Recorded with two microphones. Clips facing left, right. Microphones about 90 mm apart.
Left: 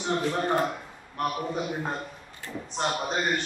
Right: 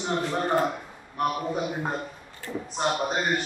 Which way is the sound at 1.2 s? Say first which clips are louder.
Right 2 dB; 5° right (ahead or behind).